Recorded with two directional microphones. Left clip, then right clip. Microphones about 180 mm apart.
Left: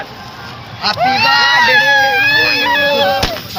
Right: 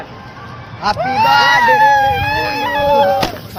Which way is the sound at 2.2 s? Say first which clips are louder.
Left 5 dB; 75° right (ahead or behind).